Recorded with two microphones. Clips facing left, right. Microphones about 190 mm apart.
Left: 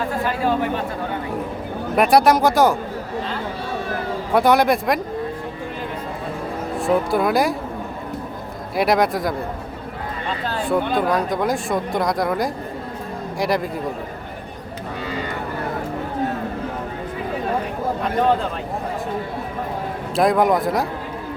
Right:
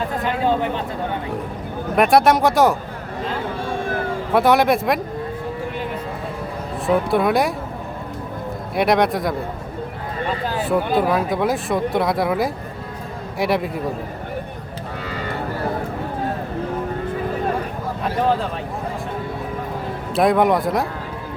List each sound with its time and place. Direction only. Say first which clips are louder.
0.3 s a sound: right 2 dB; 20° right (ahead or behind)
2.0 s speech: even; centre (ahead or behind)
4.3 s speech: even; centre (ahead or behind)
6.8 s speech: right 1 dB; centre (ahead or behind)
8.7 s speech: right 1 dB; centre (ahead or behind)
10.4 s speech: left 1 dB; 10° right (ahead or behind)
20.1 s speech: right 1 dB; centre (ahead or behind)